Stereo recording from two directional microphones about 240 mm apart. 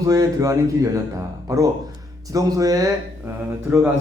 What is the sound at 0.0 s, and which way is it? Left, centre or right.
Speech, centre.